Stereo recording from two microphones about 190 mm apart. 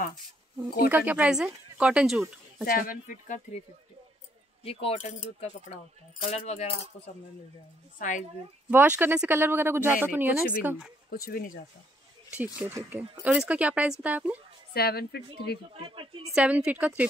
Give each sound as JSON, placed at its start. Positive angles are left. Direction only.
{"t": 0.8, "sound": "speech", "side_deg": -10}
{"t": 2.6, "sound": "speech", "side_deg": 50}
{"t": 4.6, "sound": "speech", "side_deg": 30}
{"t": 8.6, "sound": "speech", "side_deg": -5}
{"t": 11.2, "sound": "speech", "side_deg": 50}
{"t": 12.4, "sound": "speech", "side_deg": -10}
{"t": 14.7, "sound": "speech", "side_deg": 55}
{"t": 15.7, "sound": "speech", "side_deg": -30}
{"t": 16.3, "sound": "speech", "side_deg": -5}